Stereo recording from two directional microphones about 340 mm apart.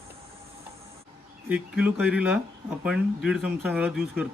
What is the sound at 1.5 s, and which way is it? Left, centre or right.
Speech, centre.